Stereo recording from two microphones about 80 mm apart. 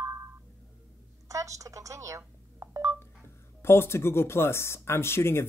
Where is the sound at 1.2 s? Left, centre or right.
Right.